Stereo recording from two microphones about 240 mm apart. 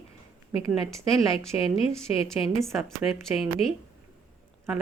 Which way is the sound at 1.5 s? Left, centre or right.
Left.